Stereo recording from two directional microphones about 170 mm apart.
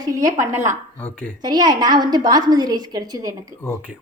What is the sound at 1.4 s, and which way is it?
A woman's voice, 25° right (ahead or behind).